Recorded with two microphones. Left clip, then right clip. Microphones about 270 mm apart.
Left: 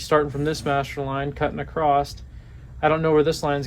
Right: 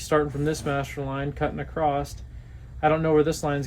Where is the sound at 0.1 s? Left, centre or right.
Centre.